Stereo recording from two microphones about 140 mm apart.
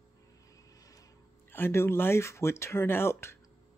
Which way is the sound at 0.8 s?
25° left (ahead or behind).